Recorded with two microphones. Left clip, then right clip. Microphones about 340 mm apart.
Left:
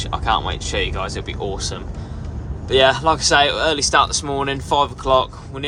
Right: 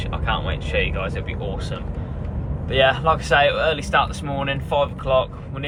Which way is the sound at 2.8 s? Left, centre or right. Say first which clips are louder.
Left 2 dB; centre.